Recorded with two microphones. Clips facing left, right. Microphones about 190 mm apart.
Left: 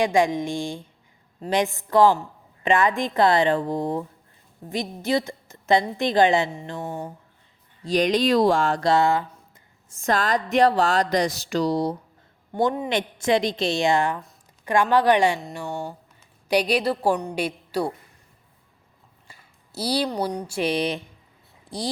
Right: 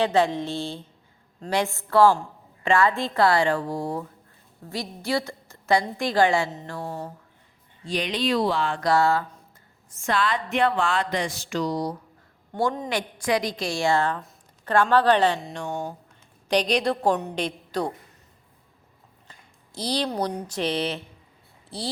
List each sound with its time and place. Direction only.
0.0 s a woman's voice: 15° left (ahead or behind)
7.9 s speech: 45° left (ahead or behind)
8.8 s a woman's voice: 20° left (ahead or behind)
10.0 s a sound: 40° left (ahead or behind)
12.5 s a woman's voice: 10° left (ahead or behind)
12.9 s a woman's voice: 25° left (ahead or behind); by 17.9 s 10° left (ahead or behind)
19.3 s a sound: 10° left (ahead or behind)
20.5 s a woman's voice: 10° left (ahead or behind)
21.7 s a sound: 15° left (ahead or behind)